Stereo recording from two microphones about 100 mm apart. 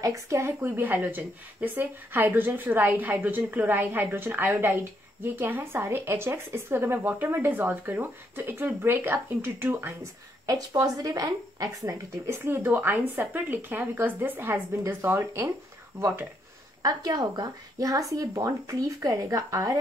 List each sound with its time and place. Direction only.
0.0 s speech: 30° right (ahead or behind)
0.5 s speech: 20° right (ahead or behind)
10.4 s speech: 35° right (ahead or behind)
16.8 s speech: 45° right (ahead or behind)